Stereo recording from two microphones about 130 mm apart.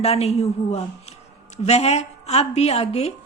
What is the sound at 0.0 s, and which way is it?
A woman's voice, 55° left (ahead or behind).